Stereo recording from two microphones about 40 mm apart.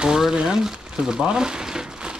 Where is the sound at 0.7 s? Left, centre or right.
Right.